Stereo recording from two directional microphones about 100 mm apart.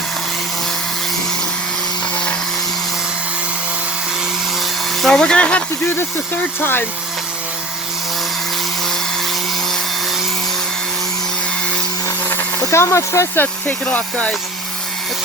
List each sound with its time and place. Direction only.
4.6 s dental drill: centre (ahead or behind)
6.6 s speech: 20° left (ahead or behind)
12.0 s speech: 25° left (ahead or behind)